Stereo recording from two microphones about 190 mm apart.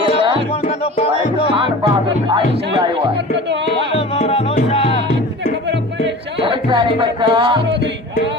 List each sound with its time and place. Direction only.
3.8 s music: 30° left (ahead or behind)
6.4 s music: 25° right (ahead or behind)